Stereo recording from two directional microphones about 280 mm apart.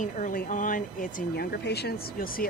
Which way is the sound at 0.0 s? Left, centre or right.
Left.